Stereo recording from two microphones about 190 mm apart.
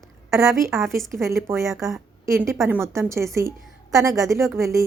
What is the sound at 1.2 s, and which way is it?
A woman's voice, 15° right (ahead or behind).